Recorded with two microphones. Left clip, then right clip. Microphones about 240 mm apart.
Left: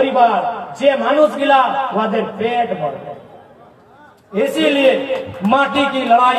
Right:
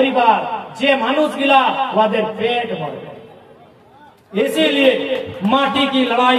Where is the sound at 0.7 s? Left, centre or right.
Right.